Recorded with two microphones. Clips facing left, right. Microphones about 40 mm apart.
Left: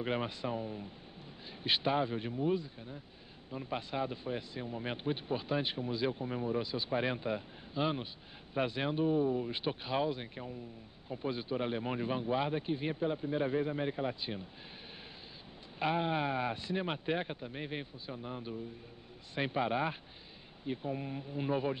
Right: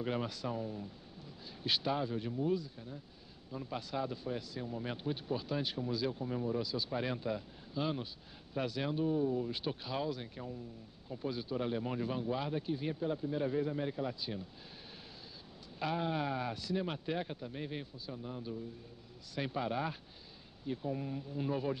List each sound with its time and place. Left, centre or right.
0.0 s speech: left
15.8 s speech: left